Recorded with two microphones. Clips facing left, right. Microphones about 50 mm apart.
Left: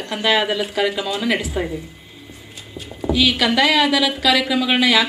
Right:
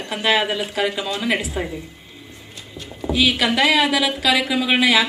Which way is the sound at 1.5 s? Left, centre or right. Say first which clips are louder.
Left 3 dB; centre.